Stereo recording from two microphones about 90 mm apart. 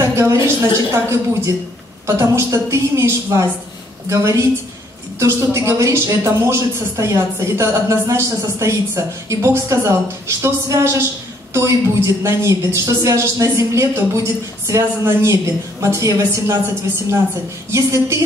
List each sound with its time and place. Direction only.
0.0 s a woman's voice: 30° right (ahead or behind)
17.6 s a woman's voice: 35° right (ahead or behind)